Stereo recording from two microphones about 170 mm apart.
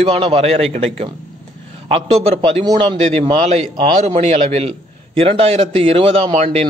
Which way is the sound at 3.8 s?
40° right (ahead or behind).